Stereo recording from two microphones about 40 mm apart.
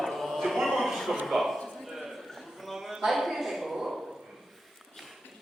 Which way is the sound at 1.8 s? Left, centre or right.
Centre.